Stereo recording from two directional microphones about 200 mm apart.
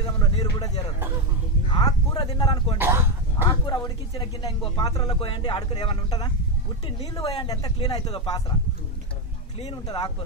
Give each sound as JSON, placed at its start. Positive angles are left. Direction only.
{"t": 0.0, "sound": "a sound", "side_deg": 20}
{"t": 1.7, "sound": "speech", "side_deg": 20}
{"t": 2.8, "sound": "dog", "side_deg": -10}
{"t": 3.6, "sound": "speech", "side_deg": 20}
{"t": 9.8, "sound": "speech", "side_deg": 20}